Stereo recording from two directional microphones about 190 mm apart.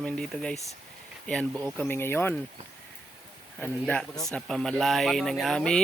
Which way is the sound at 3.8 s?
Centre (ahead or behind).